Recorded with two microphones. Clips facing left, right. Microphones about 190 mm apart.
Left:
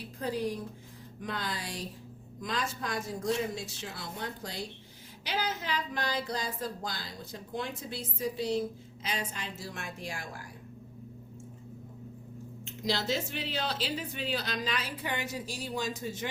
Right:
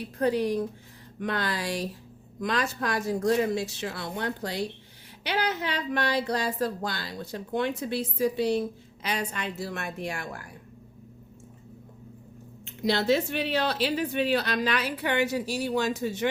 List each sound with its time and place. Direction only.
0.2 s a woman's voice: 70° right (ahead or behind)
12.6 s speech: 60° right (ahead or behind)